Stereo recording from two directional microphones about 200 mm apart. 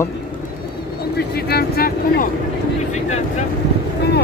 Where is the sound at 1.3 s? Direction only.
50° left (ahead or behind).